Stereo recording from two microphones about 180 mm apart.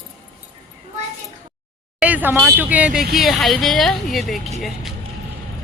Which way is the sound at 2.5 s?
10° right (ahead or behind).